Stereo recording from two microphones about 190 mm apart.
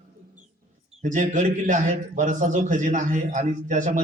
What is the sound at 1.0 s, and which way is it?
A man's voice, 40° right (ahead or behind).